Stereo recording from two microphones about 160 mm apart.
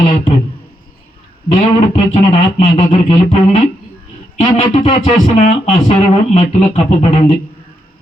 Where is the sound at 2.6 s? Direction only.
45° left (ahead or behind).